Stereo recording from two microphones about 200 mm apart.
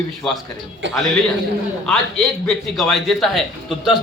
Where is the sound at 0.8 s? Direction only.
65° right (ahead or behind).